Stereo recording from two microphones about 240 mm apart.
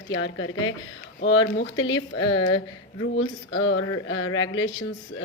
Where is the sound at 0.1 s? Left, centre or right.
Left.